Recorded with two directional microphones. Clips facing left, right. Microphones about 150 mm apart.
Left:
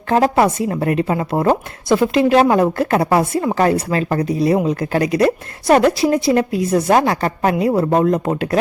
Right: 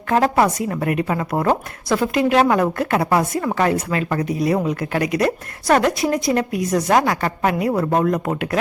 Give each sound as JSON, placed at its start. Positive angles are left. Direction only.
{"t": 0.1, "sound": "a woman's voice", "side_deg": 25}